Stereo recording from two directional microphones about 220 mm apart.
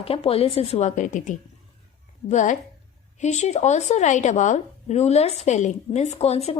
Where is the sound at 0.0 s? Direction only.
25° left (ahead or behind).